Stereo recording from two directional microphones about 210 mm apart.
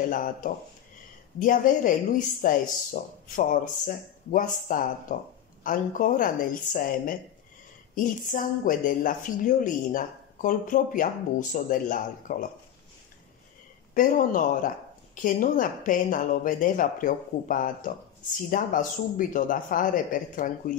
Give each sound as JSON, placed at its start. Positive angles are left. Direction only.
{"t": 0.1, "sound": "a woman's voice", "side_deg": 40}
{"t": 13.9, "sound": "a woman's voice", "side_deg": 40}